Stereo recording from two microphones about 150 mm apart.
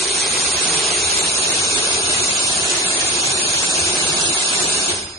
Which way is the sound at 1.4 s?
20° left (ahead or behind).